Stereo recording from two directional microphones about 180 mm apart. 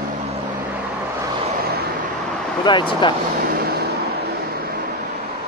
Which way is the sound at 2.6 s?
25° left (ahead or behind).